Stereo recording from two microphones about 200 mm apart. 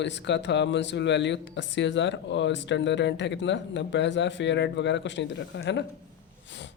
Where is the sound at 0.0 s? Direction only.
60° left (ahead or behind).